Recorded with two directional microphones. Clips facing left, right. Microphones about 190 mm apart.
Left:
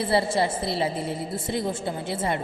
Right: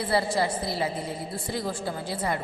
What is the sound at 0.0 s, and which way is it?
A woman's voice, 25° left (ahead or behind).